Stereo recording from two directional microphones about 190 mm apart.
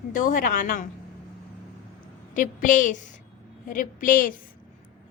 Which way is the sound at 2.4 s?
45° left (ahead or behind).